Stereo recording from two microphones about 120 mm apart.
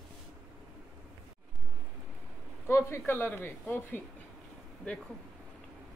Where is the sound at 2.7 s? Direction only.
20° left (ahead or behind).